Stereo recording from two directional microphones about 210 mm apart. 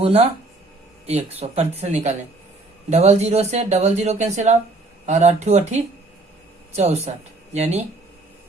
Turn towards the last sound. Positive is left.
turn(degrees=-30)  # may be behind; listen again after turning